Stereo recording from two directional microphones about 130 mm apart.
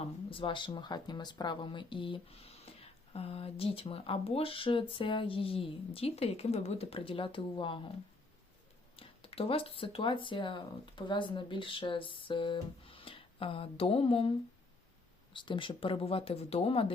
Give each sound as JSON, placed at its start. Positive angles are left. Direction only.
{"t": 0.0, "sound": "a sound", "side_deg": 45}
{"t": 0.7, "sound": "speech", "side_deg": 35}
{"t": 9.0, "sound": "speech", "side_deg": 45}